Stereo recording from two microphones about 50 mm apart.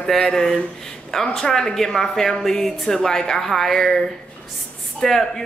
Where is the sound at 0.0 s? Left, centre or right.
Centre.